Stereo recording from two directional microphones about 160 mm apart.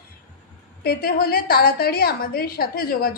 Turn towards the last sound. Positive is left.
turn(degrees=65)  # may be behind; listen again after turning